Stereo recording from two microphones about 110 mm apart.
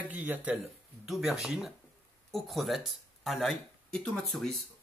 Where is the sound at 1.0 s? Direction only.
5° right (ahead or behind).